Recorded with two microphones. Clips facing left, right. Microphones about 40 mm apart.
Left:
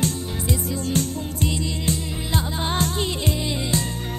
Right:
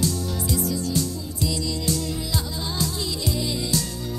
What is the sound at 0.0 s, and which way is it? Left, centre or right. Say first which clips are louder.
Music: even; left.